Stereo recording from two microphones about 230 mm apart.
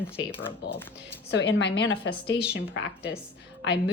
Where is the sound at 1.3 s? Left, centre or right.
Left.